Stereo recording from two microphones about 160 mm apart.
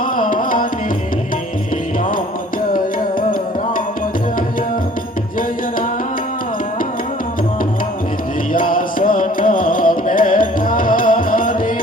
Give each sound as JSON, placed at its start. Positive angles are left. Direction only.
{"t": 0.0, "sound": "music", "side_deg": 60}
{"t": 8.5, "sound": "music", "side_deg": 60}